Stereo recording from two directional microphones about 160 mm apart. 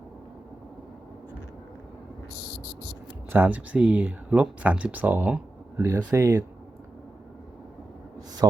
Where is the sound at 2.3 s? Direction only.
80° left.